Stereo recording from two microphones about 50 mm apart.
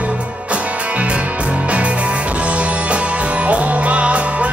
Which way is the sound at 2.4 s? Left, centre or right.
Right.